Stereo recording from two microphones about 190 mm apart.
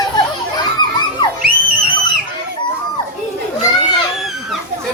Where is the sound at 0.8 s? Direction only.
25° left (ahead or behind).